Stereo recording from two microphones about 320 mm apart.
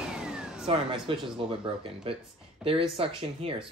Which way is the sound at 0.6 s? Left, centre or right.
Centre.